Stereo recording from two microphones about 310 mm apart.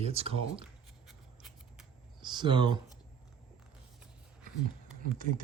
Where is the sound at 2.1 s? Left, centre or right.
Centre.